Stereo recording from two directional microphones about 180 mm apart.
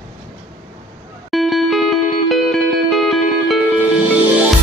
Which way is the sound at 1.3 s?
Centre (ahead or behind).